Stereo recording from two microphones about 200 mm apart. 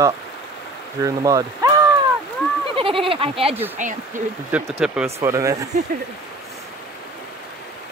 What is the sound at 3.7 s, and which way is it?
Speech, 40° right (ahead or behind).